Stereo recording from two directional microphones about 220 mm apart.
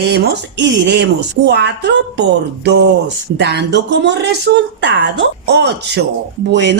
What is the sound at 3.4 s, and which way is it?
Speech, 50° right (ahead or behind).